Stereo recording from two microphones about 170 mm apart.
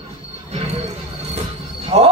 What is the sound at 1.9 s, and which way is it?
Speech, 35° right (ahead or behind).